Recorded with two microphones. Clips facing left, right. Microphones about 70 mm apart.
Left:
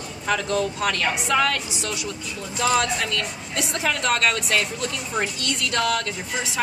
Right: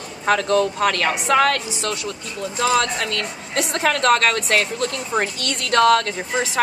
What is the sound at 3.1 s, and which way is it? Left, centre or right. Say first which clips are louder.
Speech: right 3 dB; right.